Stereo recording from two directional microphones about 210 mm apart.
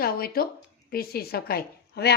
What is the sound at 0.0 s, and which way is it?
A woman's voice, 45° left (ahead or behind).